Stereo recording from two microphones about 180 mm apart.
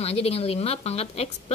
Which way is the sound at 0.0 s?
35° left (ahead or behind).